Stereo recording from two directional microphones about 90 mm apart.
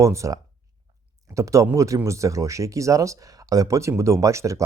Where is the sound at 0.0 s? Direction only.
35° right (ahead or behind).